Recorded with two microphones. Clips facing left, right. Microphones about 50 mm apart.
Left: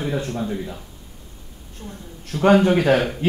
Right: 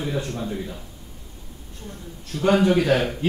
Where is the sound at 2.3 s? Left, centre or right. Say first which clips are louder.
Left 3 dB; left.